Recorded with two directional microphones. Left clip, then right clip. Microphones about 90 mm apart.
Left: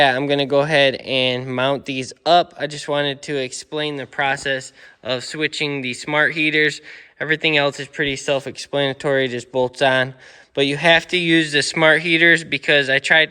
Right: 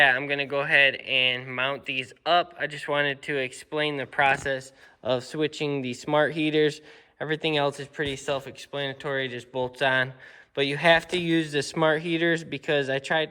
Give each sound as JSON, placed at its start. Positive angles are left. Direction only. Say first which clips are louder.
{"t": 0.0, "sound": "a man's voice", "louder": "left 5 dB", "side_deg": 85}
{"t": 5.0, "sound": "speech", "louder": "left 4 dB", "side_deg": -5}
{"t": 7.2, "sound": "speech", "louder": "left 8 dB", "side_deg": 0}
{"t": 8.0, "sound": "speech", "louder": "left 8 dB", "side_deg": 25}
{"t": 8.4, "sound": "speech", "louder": "left 11 dB", "side_deg": 50}
{"t": 11.1, "sound": "speech", "louder": "left 9 dB", "side_deg": 0}